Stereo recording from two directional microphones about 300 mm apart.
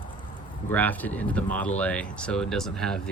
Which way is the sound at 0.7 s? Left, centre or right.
Centre.